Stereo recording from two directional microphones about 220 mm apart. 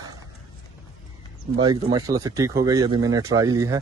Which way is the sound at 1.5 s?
20° right (ahead or behind).